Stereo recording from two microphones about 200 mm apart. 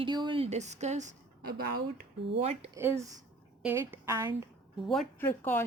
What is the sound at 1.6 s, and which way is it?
Speech, 50° right (ahead or behind).